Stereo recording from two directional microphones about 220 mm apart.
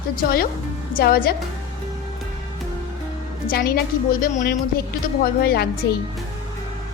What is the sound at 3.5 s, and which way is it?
A woman's voice, 45° left (ahead or behind).